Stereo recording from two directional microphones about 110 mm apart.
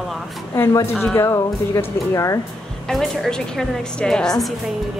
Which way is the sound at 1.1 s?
20° left (ahead or behind).